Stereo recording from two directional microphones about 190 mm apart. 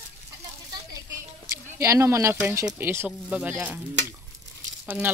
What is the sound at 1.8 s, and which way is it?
Speech, 15° right (ahead or behind).